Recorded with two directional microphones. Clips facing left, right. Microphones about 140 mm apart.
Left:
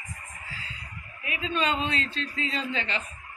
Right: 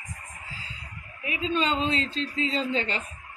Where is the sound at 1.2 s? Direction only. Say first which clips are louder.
Right 2 dB; 25° right (ahead or behind).